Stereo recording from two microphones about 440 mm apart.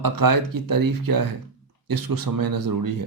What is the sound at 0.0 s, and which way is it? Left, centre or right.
Speech, right.